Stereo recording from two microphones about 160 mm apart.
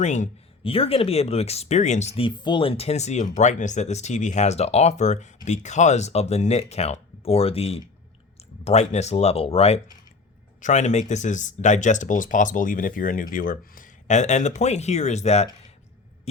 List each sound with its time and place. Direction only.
0.0 s speech: 45° left (ahead or behind)